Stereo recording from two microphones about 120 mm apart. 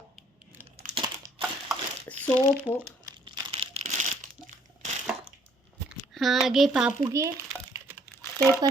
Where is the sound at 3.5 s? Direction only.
55° right (ahead or behind).